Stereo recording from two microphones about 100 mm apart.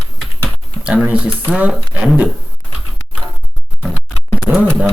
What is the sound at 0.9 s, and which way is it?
Speech, 10° right (ahead or behind).